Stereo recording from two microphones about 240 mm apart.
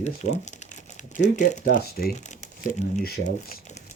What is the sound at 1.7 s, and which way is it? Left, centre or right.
Speech, left.